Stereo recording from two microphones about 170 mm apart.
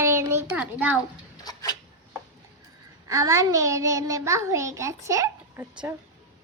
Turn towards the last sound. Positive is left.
turn(degrees=-20)  # may be behind; listen again after turning